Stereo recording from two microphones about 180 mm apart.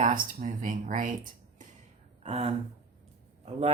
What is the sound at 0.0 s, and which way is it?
Speech, 45° right (ahead or behind).